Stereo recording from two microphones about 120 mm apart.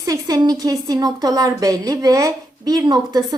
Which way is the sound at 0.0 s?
30° right (ahead or behind).